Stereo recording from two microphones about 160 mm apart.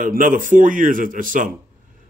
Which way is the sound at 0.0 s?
60° right (ahead or behind).